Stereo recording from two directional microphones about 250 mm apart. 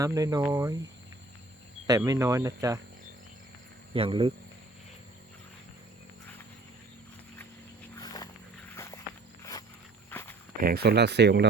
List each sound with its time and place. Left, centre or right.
0.0 s speech: centre
1.9 s speech: centre
3.9 s speech: right
7.9 s wild animals: centre
8.7 s walk: centre
10.6 s speech: right